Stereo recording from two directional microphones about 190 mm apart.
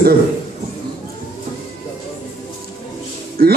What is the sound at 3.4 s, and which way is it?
Music, 50° right (ahead or behind).